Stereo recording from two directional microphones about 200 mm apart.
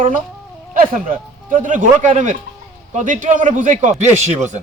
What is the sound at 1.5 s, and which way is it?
A man's voice, 40° right (ahead or behind).